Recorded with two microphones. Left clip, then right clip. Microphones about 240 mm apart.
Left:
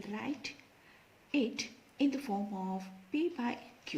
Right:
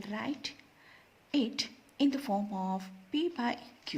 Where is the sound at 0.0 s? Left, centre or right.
Right.